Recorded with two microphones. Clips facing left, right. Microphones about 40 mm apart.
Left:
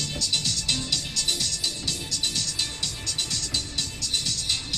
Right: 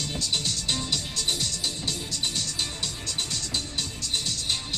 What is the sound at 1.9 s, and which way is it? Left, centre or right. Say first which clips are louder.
Music: even; left.